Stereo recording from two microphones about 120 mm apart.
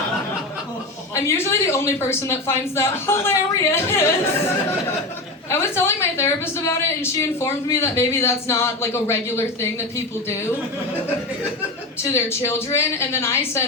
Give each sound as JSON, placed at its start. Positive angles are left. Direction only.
{"t": 1.1, "sound": "a woman's voice", "side_deg": 25}
{"t": 5.5, "sound": "a woman's voice", "side_deg": 20}
{"t": 12.0, "sound": "a woman's voice", "side_deg": 20}